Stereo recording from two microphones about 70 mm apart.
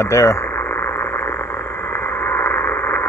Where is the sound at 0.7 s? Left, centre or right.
Left.